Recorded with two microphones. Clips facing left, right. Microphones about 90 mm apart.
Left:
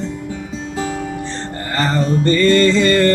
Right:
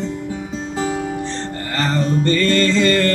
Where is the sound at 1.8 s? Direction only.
15° left (ahead or behind).